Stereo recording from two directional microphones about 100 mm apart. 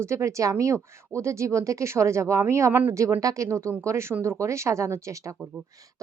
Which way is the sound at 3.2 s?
35° right (ahead or behind).